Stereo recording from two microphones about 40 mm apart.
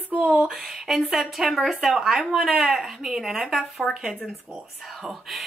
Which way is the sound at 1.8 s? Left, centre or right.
Centre.